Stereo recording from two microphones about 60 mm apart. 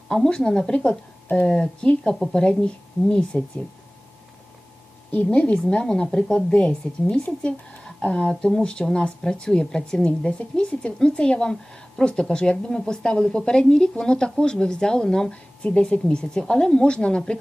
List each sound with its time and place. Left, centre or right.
0.1 s speech: centre
5.1 s speech: left
7.4 s a sound: centre
8.0 s speech: left